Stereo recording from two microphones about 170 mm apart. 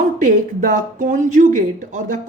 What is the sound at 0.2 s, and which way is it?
Speech, 50° right (ahead or behind).